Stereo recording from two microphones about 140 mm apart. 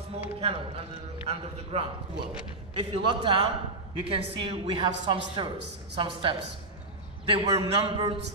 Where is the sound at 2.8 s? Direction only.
35° right (ahead or behind).